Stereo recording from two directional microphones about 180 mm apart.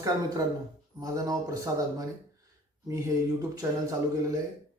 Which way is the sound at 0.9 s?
20° right (ahead or behind).